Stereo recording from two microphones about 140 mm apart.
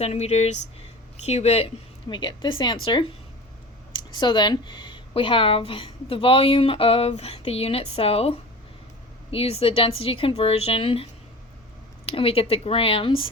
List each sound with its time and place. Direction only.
0.0 s speech: 50° left (ahead or behind)
2.0 s speech: 35° left (ahead or behind)
12.1 s speech: 45° left (ahead or behind)